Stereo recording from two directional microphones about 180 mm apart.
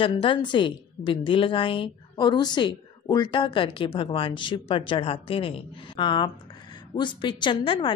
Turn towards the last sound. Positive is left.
turn(degrees=25)  # may be behind; listen again after turning